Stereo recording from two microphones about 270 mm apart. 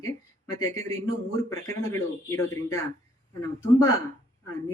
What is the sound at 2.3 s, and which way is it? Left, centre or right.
Speech, centre.